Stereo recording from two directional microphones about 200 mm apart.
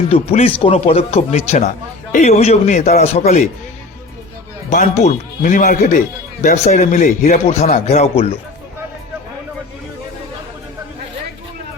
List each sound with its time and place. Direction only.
0.1 s speech: 30° left (ahead or behind)
4.7 s speech: 35° left (ahead or behind)